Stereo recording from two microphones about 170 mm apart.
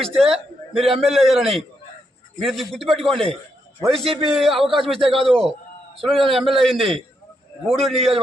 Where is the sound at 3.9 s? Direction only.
35° right (ahead or behind).